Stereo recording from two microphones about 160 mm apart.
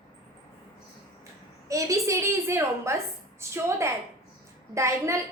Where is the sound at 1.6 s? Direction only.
20° right (ahead or behind).